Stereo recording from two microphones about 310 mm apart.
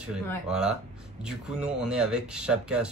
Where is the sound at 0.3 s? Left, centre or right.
Centre.